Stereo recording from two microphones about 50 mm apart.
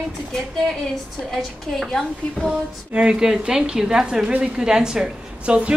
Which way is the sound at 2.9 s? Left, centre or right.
Centre.